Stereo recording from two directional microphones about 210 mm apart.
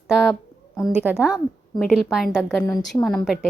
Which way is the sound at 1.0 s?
5° right (ahead or behind).